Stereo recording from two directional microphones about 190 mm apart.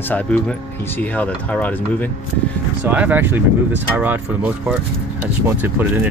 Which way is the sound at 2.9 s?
10° right (ahead or behind).